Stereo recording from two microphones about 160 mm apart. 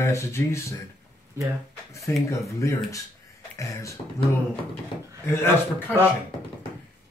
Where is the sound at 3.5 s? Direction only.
20° left (ahead or behind).